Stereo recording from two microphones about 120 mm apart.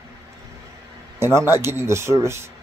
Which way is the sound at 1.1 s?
20° right (ahead or behind).